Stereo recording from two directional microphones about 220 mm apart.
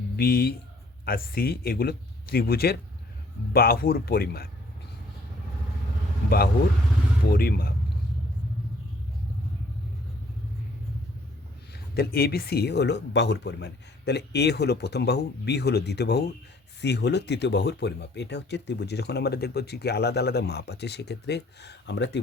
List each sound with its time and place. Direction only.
0.2 s speech: 45° left (ahead or behind)
7.3 s speech: 45° left (ahead or behind)
11.7 s speech: 45° left (ahead or behind)